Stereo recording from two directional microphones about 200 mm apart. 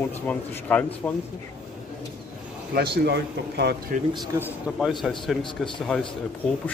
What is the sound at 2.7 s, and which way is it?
Speech, 55° right (ahead or behind).